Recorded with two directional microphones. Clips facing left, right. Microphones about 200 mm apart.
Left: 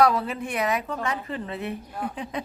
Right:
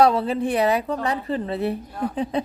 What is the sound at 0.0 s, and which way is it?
A woman's voice, 30° right (ahead or behind).